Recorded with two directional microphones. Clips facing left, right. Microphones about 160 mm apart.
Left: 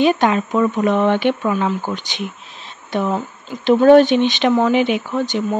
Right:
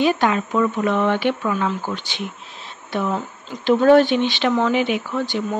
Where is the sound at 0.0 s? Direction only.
20° left (ahead or behind).